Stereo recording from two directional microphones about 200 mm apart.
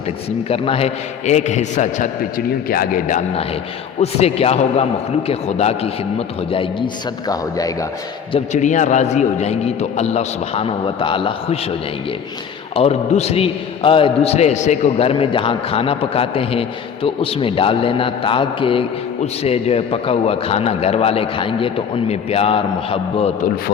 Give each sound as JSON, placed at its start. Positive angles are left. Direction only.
{"t": 0.3, "sound": "a man's voice", "side_deg": 30}
{"t": 8.3, "sound": "a man's voice", "side_deg": 40}
{"t": 12.7, "sound": "a man's voice", "side_deg": 30}